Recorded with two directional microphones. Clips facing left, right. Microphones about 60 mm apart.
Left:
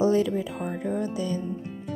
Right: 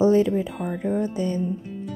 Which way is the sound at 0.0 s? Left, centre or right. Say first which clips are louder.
Right 4 dB; right.